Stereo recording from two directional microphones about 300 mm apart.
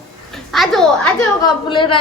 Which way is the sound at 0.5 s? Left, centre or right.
Centre.